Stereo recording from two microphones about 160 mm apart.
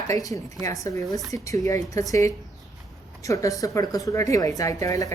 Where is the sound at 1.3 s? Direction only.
20° left (ahead or behind).